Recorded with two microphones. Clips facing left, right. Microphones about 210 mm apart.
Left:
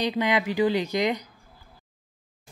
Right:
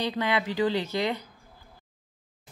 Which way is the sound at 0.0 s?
15° left (ahead or behind).